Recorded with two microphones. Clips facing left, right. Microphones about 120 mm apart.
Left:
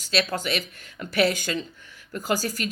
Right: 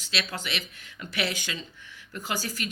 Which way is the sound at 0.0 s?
45° left (ahead or behind).